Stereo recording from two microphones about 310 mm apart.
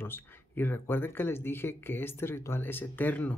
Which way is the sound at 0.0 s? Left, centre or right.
Centre.